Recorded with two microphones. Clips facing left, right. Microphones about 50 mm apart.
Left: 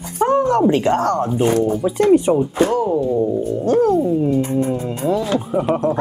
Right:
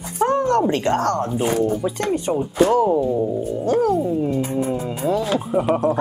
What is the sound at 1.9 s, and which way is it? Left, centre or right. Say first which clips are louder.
Speech: left 8 dB; centre.